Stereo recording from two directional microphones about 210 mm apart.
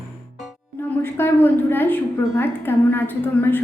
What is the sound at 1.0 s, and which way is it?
A woman's voice, 10° left (ahead or behind).